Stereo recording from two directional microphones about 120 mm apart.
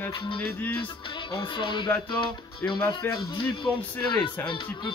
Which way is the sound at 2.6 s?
15° left (ahead or behind).